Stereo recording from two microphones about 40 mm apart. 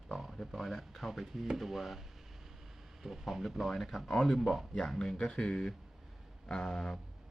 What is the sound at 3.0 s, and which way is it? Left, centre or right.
Speech, centre.